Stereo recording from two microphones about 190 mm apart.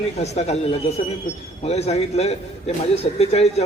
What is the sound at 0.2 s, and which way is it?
A man's voice, 35° left (ahead or behind).